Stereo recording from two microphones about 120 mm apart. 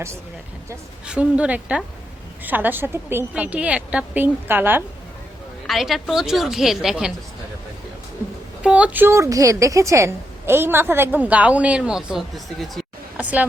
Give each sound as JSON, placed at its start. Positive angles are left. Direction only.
{"t": 1.0, "sound": "a woman's voice", "side_deg": -10}
{"t": 5.6, "sound": "a woman's voice", "side_deg": 0}
{"t": 8.6, "sound": "a woman's voice", "side_deg": -10}